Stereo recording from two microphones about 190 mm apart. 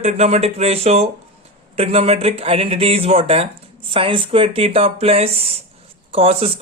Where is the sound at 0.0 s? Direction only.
35° right (ahead or behind).